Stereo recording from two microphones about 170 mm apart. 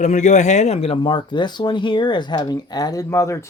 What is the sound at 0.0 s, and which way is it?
Speech, 45° left (ahead or behind).